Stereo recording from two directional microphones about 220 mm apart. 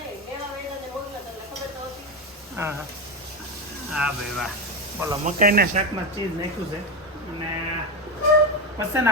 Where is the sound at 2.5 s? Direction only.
10° right (ahead or behind).